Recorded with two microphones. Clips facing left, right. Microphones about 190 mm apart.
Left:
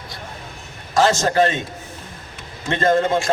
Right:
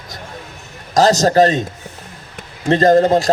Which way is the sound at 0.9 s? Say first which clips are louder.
Right 5 dB; 40° right (ahead or behind).